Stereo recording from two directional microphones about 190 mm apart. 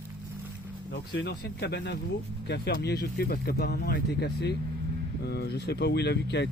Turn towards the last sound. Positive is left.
turn(degrees=65)  # may be behind; listen again after turning